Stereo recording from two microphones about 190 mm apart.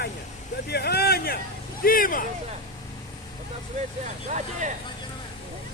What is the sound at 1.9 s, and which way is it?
Vehicle, 45° left (ahead or behind).